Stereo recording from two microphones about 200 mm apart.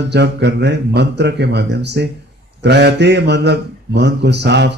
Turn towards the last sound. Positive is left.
turn(degrees=-60)  # may be behind; listen again after turning